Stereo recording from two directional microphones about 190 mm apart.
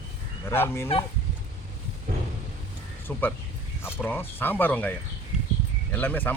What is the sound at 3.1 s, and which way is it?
Speech, 10° left (ahead or behind).